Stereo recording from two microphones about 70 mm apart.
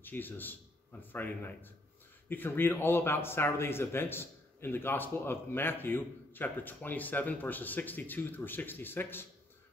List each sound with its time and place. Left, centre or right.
0.0 s a man's voice: left